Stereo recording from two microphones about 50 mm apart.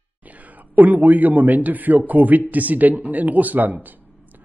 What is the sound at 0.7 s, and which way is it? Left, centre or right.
A man's voice, right.